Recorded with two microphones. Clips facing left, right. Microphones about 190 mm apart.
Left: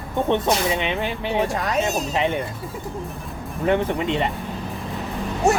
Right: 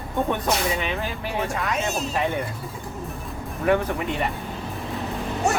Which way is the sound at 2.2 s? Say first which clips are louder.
Left 2 dB; 20° left (ahead or behind).